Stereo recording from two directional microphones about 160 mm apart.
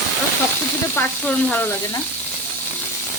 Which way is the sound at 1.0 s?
10° left (ahead or behind).